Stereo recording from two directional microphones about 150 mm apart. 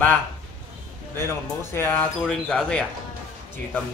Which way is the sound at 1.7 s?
15° left (ahead or behind).